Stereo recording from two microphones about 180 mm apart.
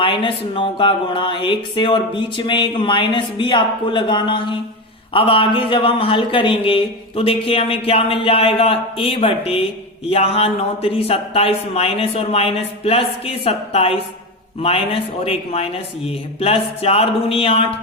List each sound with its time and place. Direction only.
0.0 s speech: 30° left (ahead or behind)